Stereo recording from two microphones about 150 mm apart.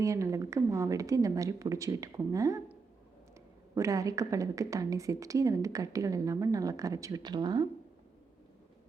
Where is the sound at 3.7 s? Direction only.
20° right (ahead or behind).